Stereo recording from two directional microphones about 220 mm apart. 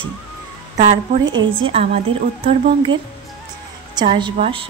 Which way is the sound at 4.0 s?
20° right (ahead or behind).